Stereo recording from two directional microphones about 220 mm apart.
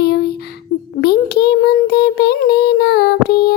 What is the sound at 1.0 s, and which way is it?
Child singing, 45° left (ahead or behind).